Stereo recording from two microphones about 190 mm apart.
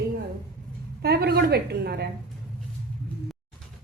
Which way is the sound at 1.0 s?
60° right (ahead or behind).